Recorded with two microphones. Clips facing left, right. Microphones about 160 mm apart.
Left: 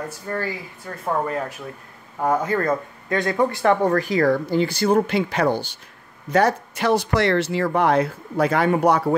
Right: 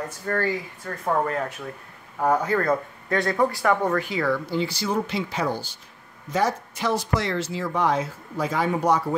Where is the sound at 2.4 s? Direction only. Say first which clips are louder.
Left 1 dB; 15° left (ahead or behind).